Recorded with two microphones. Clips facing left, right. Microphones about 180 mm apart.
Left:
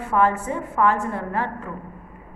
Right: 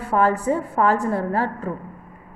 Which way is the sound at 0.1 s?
35° right (ahead or behind).